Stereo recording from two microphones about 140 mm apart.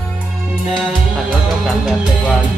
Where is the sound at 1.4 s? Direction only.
Centre (ahead or behind).